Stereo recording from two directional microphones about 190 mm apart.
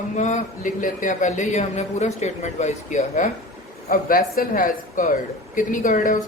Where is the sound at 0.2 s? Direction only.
40° left (ahead or behind).